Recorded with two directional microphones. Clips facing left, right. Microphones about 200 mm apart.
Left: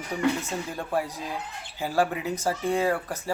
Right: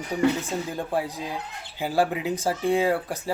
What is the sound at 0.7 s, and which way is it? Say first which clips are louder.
Speech: left 1 dB; 15° right (ahead or behind).